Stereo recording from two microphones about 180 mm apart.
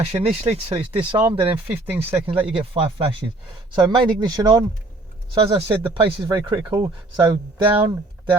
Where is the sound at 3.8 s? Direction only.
25° right (ahead or behind).